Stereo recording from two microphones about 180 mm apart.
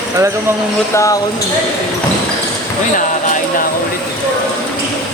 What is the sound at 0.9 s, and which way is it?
Speech, 15° left (ahead or behind).